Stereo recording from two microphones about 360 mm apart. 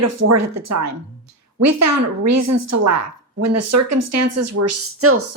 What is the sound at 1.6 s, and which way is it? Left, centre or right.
Speech, right.